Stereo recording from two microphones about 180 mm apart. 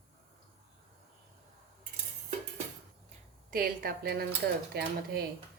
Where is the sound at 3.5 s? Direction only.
55° right (ahead or behind).